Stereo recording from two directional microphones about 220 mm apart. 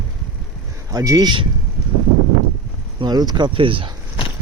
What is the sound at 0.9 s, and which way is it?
Speech, 15° right (ahead or behind).